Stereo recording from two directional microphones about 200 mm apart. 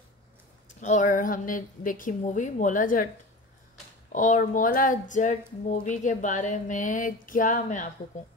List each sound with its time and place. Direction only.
0.7 s a woman's voice: 40° left (ahead or behind)
4.1 s a woman's voice: 40° left (ahead or behind)